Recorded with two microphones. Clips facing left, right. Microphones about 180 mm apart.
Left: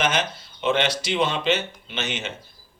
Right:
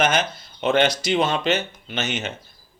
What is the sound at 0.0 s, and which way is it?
Speech, 45° right (ahead or behind).